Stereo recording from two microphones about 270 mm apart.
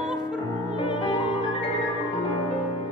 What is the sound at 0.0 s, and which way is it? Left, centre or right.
Opera, centre.